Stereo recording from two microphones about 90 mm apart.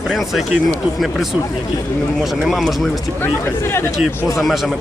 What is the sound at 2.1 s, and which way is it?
Speech, centre (ahead or behind).